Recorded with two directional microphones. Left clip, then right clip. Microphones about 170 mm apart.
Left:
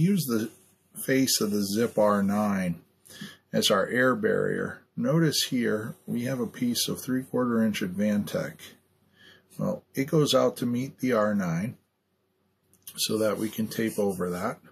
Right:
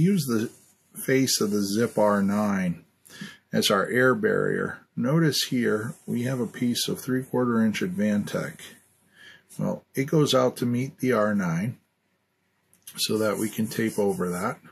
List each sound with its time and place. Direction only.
0.0 s speech: 35° right (ahead or behind)
12.8 s speech: 35° right (ahead or behind)